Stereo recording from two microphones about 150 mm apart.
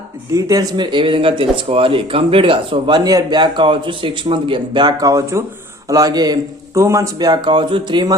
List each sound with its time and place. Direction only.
0.3 s a man's voice: 25° right (ahead or behind)